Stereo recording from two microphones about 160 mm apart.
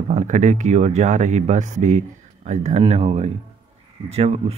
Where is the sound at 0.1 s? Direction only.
45° right (ahead or behind).